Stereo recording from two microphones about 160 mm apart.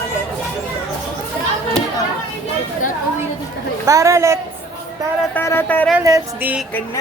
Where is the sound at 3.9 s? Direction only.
20° right (ahead or behind).